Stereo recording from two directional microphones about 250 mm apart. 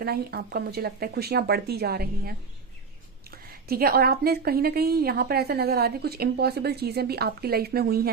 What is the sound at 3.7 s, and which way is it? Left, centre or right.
A woman's voice, right.